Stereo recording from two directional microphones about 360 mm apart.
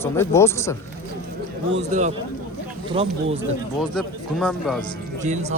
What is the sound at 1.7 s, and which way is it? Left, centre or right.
Speech, right.